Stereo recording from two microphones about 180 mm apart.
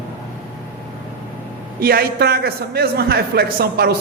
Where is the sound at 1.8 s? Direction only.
55° right (ahead or behind).